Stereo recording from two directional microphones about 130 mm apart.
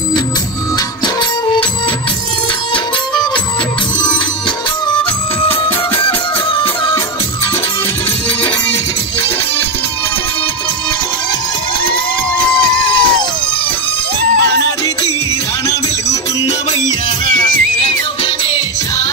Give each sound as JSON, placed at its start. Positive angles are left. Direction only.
{"t": 5.5, "sound": "music", "side_deg": 40}
{"t": 12.9, "sound": "a sound", "side_deg": 40}
{"t": 17.4, "sound": "music", "side_deg": 40}